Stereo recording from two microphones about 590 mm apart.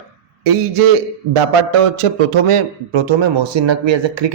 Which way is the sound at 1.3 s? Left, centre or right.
Right.